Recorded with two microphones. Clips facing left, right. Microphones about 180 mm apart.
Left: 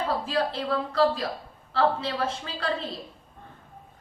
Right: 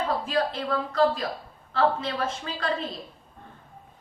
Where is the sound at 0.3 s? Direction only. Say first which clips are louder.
Even; 30° left (ahead or behind).